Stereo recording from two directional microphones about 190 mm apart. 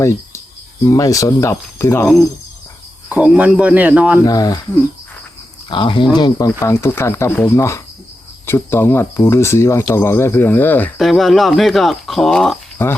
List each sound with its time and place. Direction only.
0.9 s speech: 15° left (ahead or behind)
3.1 s speech: 5° right (ahead or behind)
4.2 s speech: 20° left (ahead or behind)
5.7 s speech: 25° left (ahead or behind); by 13.0 s 5° left (ahead or behind)